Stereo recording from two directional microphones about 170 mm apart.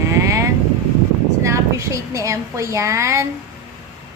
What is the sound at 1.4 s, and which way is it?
A woman's voice, 20° right (ahead or behind).